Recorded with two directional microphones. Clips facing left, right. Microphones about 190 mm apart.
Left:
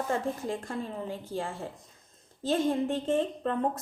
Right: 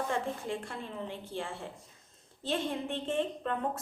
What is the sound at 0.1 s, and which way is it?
A woman's voice, 40° left (ahead or behind).